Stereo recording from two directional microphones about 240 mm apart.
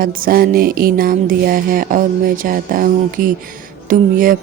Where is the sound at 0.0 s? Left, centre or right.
Right.